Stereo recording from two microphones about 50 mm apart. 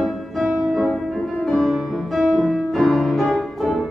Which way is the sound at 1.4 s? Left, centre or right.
Centre.